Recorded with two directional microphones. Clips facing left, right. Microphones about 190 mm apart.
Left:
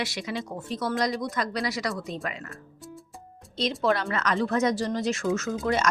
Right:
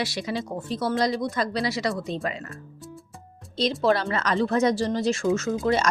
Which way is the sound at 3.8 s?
30° right (ahead or behind).